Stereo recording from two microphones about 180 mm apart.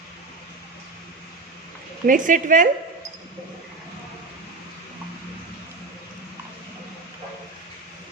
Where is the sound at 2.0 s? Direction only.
45° right (ahead or behind).